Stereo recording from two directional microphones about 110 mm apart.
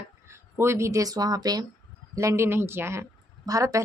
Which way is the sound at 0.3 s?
25° right (ahead or behind).